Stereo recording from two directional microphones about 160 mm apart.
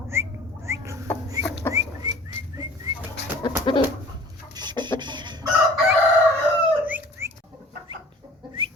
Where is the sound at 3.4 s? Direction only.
30° left (ahead or behind).